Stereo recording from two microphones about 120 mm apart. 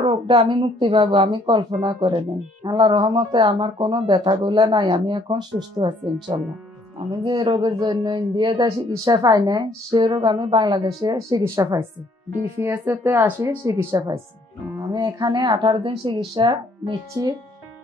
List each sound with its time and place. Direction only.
0.0 s speech: 45° right (ahead or behind)
7.5 s speech: 40° right (ahead or behind)
8.6 s speech: 30° right (ahead or behind)
13.9 s speech: 30° right (ahead or behind)